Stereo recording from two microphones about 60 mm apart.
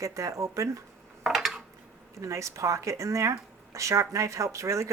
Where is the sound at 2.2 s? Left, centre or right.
Right.